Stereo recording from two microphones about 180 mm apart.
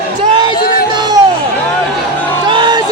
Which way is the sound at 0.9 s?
25° right (ahead or behind).